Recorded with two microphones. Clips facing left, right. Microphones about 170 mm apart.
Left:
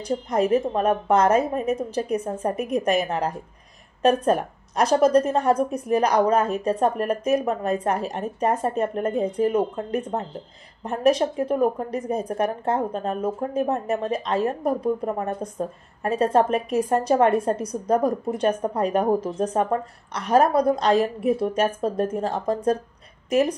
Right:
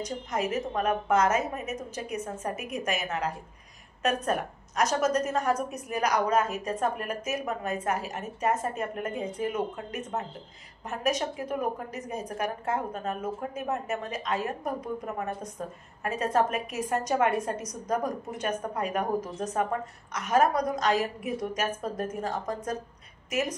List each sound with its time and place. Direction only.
0.0 s a woman's voice: 30° left (ahead or behind)